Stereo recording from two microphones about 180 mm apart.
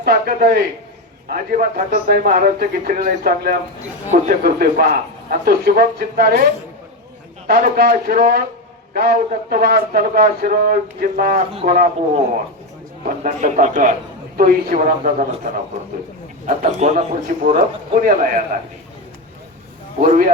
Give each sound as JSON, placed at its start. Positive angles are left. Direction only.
{"t": 0.0, "sound": "a man's voice", "side_deg": -55}
{"t": 7.4, "sound": "a man's voice", "side_deg": -55}
{"t": 13.2, "sound": "a man's voice", "side_deg": -45}
{"t": 20.0, "sound": "a man's voice", "side_deg": -50}